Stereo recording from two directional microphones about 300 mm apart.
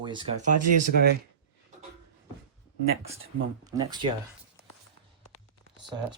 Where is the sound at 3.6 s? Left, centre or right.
Centre.